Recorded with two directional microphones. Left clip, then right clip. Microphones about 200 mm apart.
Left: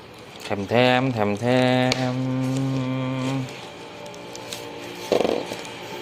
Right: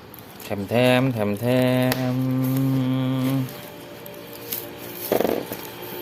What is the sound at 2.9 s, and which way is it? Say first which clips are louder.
Mantra: right 2 dB; 30° right (ahead or behind).